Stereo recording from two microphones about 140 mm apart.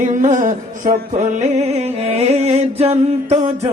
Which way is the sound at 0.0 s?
65° right (ahead or behind).